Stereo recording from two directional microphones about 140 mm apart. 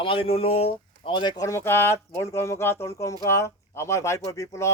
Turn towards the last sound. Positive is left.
turn(degrees=20)  # may be behind; listen again after turning